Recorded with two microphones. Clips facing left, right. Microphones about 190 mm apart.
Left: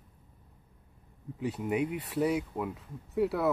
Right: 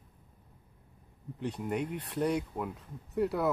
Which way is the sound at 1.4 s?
5° left (ahead or behind).